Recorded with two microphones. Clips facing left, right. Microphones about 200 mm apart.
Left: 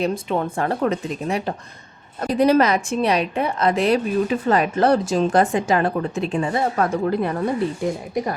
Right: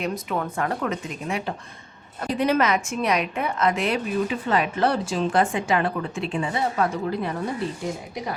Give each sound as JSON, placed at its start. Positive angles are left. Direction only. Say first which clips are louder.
{"t": 0.0, "sound": "a woman's voice", "louder": "left 5 dB", "side_deg": 30}